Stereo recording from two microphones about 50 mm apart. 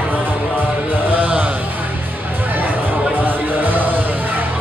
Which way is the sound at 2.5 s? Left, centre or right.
Right.